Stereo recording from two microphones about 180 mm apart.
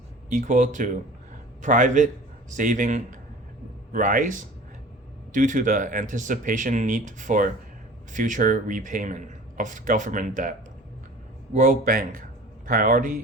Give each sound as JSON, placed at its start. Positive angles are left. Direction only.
{"t": 0.3, "sound": "speech", "side_deg": -45}
{"t": 11.5, "sound": "speech", "side_deg": -45}